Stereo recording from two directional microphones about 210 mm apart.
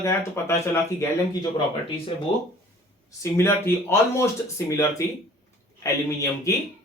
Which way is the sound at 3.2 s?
15° left (ahead or behind).